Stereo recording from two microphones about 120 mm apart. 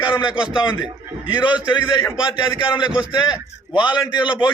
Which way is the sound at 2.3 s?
40° left (ahead or behind).